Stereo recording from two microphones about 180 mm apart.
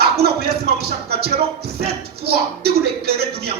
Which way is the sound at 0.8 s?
60° right (ahead or behind).